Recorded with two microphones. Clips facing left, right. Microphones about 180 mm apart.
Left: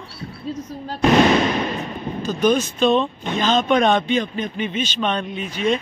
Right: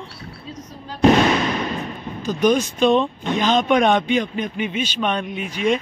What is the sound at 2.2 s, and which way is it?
Speech, 15° right (ahead or behind).